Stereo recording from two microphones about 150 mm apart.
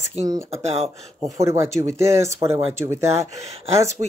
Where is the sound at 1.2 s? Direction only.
20° right (ahead or behind).